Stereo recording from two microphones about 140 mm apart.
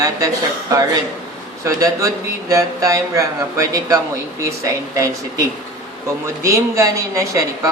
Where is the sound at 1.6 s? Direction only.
25° right (ahead or behind).